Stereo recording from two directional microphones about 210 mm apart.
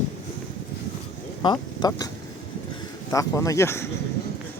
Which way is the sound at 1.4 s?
20° left (ahead or behind).